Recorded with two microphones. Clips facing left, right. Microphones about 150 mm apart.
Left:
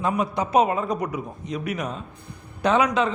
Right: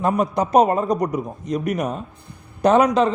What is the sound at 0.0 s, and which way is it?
A man's voice, 45° right (ahead or behind).